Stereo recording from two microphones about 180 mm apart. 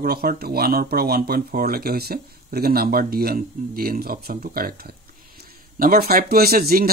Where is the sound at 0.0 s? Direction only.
55° right (ahead or behind).